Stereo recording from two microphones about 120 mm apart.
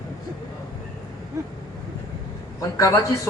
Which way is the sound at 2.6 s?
25° left (ahead or behind).